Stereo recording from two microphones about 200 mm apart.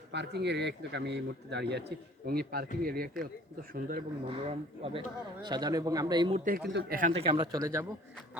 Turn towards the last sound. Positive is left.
turn(degrees=-15)  # may be behind; listen again after turning